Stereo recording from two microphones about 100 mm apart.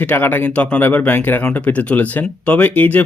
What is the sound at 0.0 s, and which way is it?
Speech, 20° left (ahead or behind).